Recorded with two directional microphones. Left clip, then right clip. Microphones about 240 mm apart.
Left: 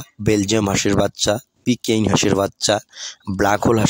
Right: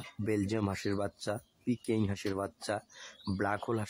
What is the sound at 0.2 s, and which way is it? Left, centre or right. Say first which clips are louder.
Speech: left 15 dB; left.